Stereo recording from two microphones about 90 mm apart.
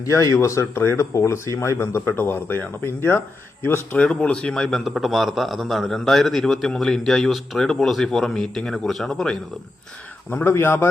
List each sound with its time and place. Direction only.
0.0 s a man's voice: 35° left (ahead or behind); by 9.4 s 5° left (ahead or behind)
10.2 s speech: 25° left (ahead or behind)